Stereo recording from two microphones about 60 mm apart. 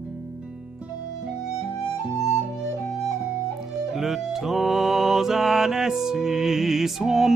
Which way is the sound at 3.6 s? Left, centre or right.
Centre.